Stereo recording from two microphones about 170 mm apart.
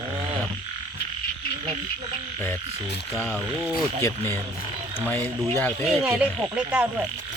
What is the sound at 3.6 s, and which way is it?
Speech, 15° left (ahead or behind).